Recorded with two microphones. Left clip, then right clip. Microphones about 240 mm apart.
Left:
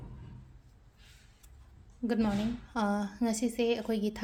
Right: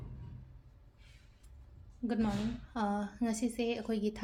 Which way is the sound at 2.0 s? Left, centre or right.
Left.